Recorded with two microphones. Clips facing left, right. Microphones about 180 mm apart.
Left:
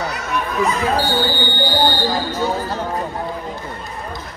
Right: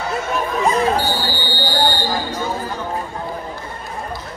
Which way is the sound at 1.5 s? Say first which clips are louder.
Left 2 dB; 55° left (ahead or behind).